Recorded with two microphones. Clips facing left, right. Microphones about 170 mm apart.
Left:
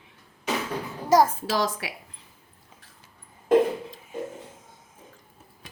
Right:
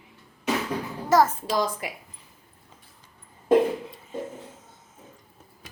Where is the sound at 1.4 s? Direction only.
90° left.